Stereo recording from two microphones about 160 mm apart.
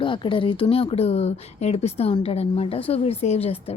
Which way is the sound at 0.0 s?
30° left (ahead or behind).